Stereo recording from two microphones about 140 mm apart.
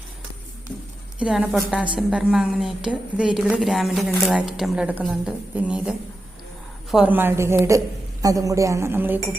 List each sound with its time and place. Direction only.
1.2 s a woman's voice: 10° right (ahead or behind)